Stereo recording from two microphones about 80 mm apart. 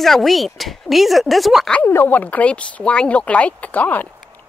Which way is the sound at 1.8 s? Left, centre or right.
Left.